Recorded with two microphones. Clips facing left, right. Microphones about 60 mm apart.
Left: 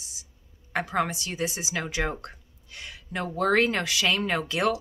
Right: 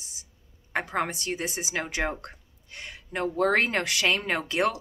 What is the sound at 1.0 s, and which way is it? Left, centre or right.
Speech, right.